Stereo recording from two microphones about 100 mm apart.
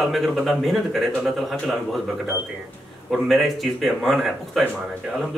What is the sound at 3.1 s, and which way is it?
A man's voice, centre (ahead or behind).